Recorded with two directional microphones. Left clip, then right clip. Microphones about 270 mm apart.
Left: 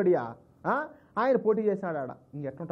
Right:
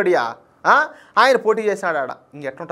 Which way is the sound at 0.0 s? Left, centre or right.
Centre.